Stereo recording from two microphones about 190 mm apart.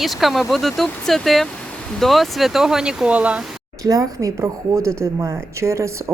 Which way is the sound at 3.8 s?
15° right (ahead or behind).